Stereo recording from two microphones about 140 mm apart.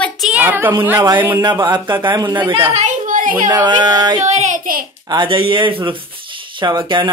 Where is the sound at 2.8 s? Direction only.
70° right (ahead or behind).